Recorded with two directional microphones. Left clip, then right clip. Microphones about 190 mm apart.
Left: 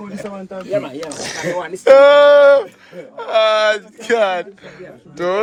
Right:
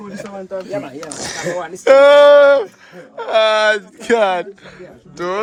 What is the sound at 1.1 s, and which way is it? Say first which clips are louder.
A man's voice: even; 30° right (ahead or behind).